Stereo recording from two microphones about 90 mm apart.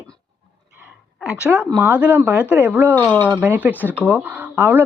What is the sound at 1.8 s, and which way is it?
Speech, 20° right (ahead or behind).